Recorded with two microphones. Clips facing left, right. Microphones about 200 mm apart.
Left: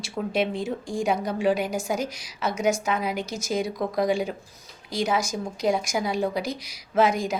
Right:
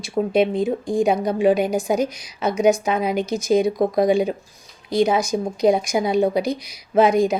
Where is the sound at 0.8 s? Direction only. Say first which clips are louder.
Right 8 dB; 60° right (ahead or behind).